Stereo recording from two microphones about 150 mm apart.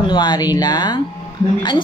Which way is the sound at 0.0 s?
30° left (ahead or behind).